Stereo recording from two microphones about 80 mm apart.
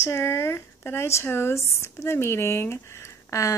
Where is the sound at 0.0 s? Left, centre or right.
Left.